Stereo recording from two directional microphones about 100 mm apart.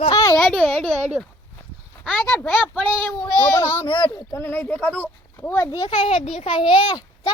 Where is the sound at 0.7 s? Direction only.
90° right.